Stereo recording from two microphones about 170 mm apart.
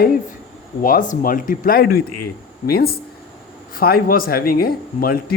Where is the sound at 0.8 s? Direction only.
50° left (ahead or behind).